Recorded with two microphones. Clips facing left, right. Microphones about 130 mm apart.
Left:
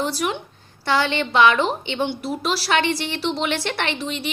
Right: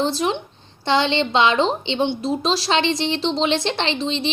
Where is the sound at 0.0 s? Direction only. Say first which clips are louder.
Right 3 dB; 25° right (ahead or behind).